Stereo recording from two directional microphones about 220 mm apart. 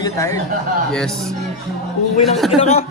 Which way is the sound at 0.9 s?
Centre (ahead or behind).